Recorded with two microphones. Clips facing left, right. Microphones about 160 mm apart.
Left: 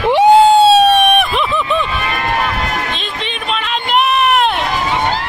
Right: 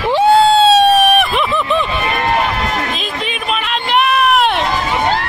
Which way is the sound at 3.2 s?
Centre (ahead or behind).